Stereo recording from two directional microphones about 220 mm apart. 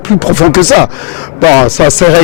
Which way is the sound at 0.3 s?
5° right (ahead or behind).